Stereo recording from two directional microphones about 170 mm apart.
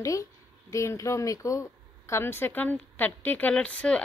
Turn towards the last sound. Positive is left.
turn(degrees=5)  # may be behind; listen again after turning